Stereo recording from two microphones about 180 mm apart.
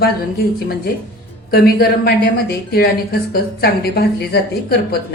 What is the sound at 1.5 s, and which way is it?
A woman's voice, 55° left (ahead or behind).